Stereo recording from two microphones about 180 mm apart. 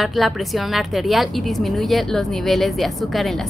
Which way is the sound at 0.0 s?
Centre (ahead or behind).